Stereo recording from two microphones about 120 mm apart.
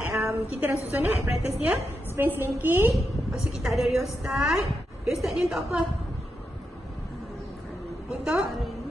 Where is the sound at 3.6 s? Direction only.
Centre (ahead or behind).